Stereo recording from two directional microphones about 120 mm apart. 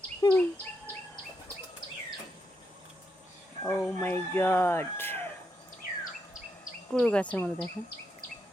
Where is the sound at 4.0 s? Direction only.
20° left (ahead or behind).